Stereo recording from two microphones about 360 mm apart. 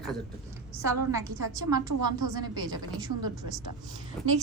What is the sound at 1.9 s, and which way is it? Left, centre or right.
Speech, right.